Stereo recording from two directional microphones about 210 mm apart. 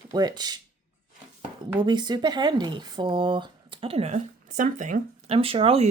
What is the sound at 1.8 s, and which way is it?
Speech, 20° right (ahead or behind).